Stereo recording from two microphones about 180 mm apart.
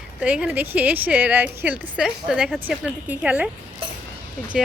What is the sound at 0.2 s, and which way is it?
A woman's voice, 5° right (ahead or behind).